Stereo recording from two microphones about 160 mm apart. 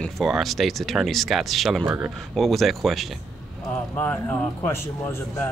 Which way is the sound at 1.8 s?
15° right (ahead or behind).